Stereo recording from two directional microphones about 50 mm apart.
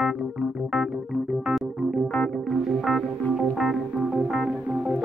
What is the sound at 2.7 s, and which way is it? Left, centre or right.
Music, centre.